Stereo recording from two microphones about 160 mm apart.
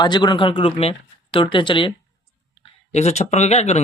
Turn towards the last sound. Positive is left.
turn(degrees=45)  # may be behind; listen again after turning